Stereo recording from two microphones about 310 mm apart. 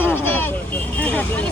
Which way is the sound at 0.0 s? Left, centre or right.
Centre.